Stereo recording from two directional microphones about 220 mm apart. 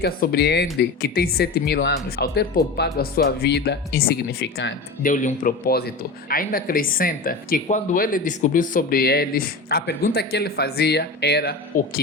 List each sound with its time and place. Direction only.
0.0 s speech: 45° left (ahead or behind)
5.0 s speech: 35° left (ahead or behind)